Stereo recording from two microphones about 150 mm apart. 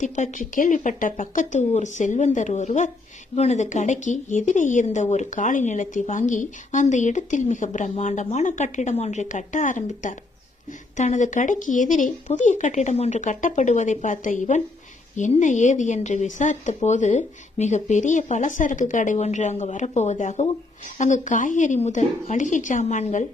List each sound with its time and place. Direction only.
0.0 s a woman's voice: 55° left (ahead or behind)